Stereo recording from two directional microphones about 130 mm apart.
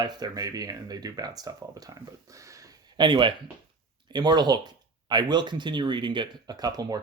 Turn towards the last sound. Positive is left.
turn(degrees=-30)  # may be behind; listen again after turning